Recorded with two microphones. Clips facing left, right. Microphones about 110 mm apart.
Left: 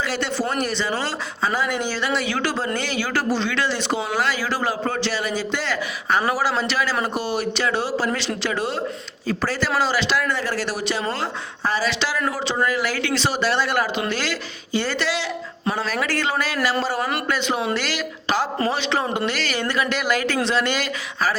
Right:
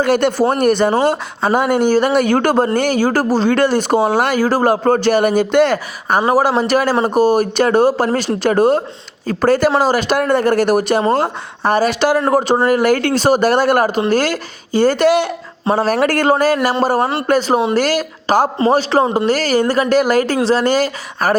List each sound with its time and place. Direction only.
0.0 s speech: 55° right (ahead or behind)
15.6 s speech: 40° right (ahead or behind)